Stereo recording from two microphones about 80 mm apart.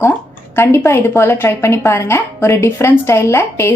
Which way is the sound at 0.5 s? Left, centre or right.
Left.